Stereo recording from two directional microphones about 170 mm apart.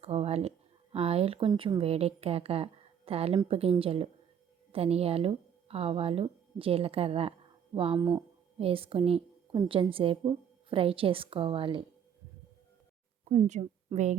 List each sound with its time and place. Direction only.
0.0 s a sound: 40° right (ahead or behind)
0.9 s speech: 35° right (ahead or behind)
13.5 s a woman's voice: 45° right (ahead or behind)